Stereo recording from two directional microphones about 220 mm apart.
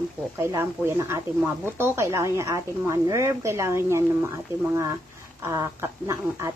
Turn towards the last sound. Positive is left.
turn(degrees=-15)  # may be behind; listen again after turning